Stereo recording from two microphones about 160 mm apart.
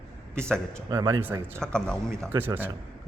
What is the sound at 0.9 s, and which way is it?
Speech, 25° right (ahead or behind).